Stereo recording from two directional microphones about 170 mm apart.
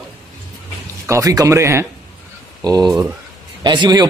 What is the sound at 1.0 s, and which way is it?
A man's voice, 20° right (ahead or behind).